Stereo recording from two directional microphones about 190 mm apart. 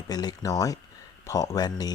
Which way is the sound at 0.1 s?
20° left (ahead or behind).